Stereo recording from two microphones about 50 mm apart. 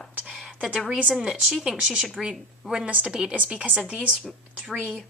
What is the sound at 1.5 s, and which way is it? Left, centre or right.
A woman's voice, centre.